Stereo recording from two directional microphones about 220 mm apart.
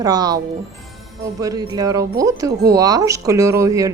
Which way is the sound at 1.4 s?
15° right (ahead or behind).